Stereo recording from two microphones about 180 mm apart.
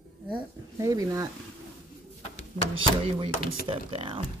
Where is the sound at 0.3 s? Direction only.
20° right (ahead or behind).